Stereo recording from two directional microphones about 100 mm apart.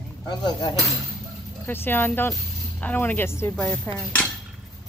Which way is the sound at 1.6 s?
20° left (ahead or behind).